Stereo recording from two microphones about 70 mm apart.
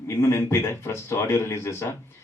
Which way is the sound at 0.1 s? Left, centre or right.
Left.